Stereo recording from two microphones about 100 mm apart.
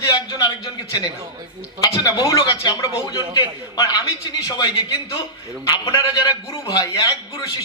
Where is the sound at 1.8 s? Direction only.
40° left (ahead or behind).